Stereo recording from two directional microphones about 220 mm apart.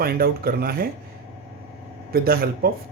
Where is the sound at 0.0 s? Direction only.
45° right (ahead or behind).